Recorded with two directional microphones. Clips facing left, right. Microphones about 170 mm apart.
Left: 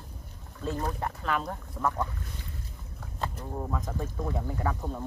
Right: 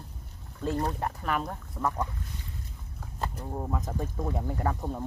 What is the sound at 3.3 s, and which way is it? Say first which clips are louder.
Speech: right 1 dB; 20° right (ahead or behind).